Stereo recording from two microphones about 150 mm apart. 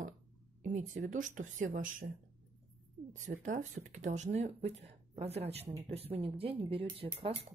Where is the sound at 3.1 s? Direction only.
55° right (ahead or behind); by 7.4 s 40° right (ahead or behind).